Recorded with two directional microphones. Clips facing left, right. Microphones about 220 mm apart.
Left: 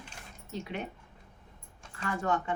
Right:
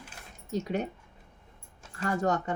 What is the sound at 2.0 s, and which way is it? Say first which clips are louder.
Speech: right 3 dB; 40° right (ahead or behind).